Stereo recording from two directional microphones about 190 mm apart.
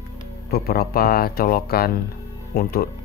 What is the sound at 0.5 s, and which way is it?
Speech, 55° left (ahead or behind).